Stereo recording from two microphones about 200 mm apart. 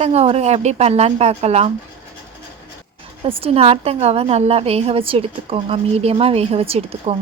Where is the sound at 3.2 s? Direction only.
30° right (ahead or behind).